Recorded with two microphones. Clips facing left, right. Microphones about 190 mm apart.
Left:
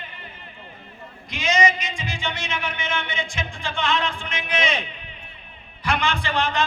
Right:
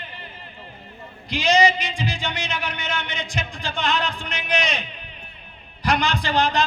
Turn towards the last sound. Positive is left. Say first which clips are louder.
# right 3 dB
turn(degrees=-40)  # may be behind; listen again after turning